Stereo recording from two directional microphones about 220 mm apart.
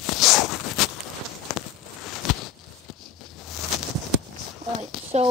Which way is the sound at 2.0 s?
Centre (ahead or behind).